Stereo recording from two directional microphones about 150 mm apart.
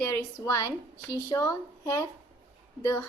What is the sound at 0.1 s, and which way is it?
A woman's voice, 20° left (ahead or behind).